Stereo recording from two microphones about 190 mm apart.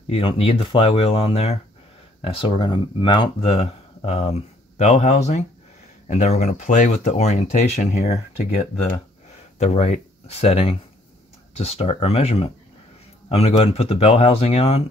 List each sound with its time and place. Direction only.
0.1 s speech: 30° left (ahead or behind)